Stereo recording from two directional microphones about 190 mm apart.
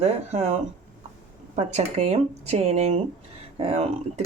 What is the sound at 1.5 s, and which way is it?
Speech, 35° right (ahead or behind).